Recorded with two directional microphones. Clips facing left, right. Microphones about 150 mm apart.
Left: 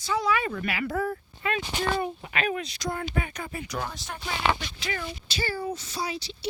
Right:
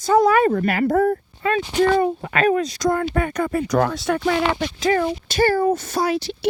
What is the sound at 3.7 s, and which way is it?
Speech, 80° right.